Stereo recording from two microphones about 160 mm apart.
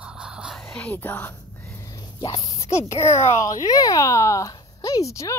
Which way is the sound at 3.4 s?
20° left (ahead or behind).